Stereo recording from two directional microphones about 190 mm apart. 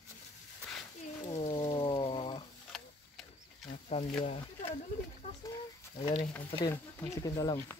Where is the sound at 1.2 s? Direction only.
30° left (ahead or behind).